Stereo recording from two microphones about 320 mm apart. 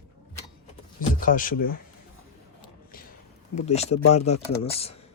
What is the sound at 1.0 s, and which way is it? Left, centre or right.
Speech, left.